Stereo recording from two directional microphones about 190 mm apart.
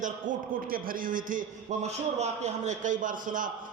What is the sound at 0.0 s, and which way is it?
A man's voice, 45° right (ahead or behind).